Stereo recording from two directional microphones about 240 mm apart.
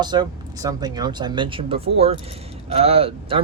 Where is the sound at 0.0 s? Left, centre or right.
Centre.